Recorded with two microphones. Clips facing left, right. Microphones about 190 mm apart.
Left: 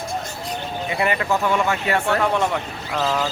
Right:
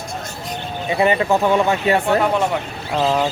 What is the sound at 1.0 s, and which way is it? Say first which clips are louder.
Speech: right 6 dB; 25° right (ahead or behind).